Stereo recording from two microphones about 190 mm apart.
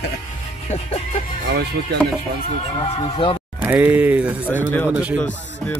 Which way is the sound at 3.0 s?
30° left (ahead or behind).